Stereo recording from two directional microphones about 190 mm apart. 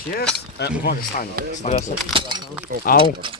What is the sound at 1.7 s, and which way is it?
Speech, 40° left (ahead or behind).